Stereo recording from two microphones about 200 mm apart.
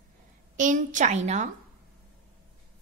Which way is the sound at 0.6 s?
40° right (ahead or behind).